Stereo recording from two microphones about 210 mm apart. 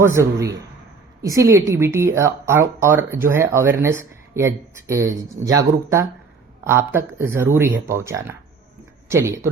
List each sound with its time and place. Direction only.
0.0 s speech: 10° right (ahead or behind)